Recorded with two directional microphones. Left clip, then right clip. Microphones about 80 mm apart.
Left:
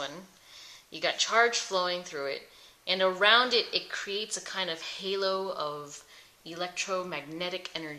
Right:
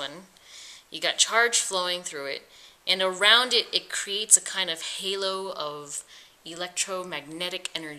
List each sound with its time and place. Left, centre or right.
0.9 s speech: right